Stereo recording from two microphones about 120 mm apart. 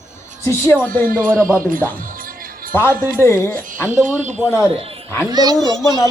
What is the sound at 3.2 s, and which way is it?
Speech, 15° left (ahead or behind).